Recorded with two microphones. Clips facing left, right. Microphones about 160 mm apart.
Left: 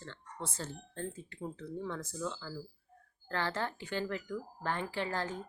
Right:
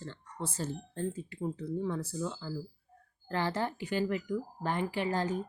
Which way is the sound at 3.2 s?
15° right (ahead or behind).